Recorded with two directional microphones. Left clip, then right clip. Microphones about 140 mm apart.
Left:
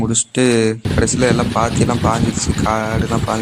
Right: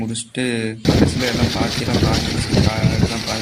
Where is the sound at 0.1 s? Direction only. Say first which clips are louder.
Left 9 dB; 30° left (ahead or behind).